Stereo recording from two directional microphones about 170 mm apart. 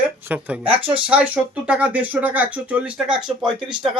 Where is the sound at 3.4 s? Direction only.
30° right (ahead or behind).